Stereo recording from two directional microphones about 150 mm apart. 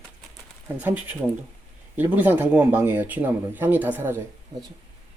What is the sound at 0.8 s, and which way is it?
Speech, 10° right (ahead or behind).